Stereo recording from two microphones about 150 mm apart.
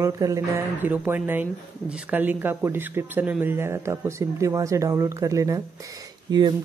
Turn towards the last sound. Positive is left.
turn(degrees=-25)  # may be behind; listen again after turning